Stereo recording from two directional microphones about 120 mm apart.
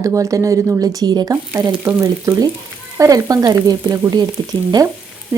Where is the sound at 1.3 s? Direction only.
25° right (ahead or behind).